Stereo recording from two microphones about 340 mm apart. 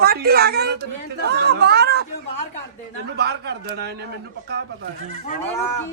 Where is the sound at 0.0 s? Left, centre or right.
Right.